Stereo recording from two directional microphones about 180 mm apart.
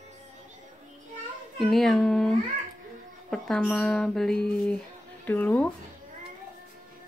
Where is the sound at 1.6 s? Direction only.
Centre (ahead or behind).